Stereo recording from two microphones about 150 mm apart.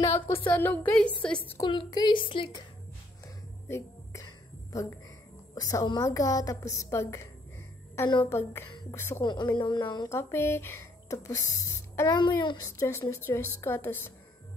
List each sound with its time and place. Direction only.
0.3 s a woman's voice: 15° left (ahead or behind)
1.6 s a woman's voice: 30° left (ahead or behind)
3.6 s music: 20° left (ahead or behind)
5.5 s a woman's voice: 25° left (ahead or behind)
8.3 s a woman's voice: 15° left (ahead or behind)
9.2 s a woman's voice: 30° left (ahead or behind)
10.0 s speech: 15° left (ahead or behind)
12.2 s a woman's voice: 30° left (ahead or behind)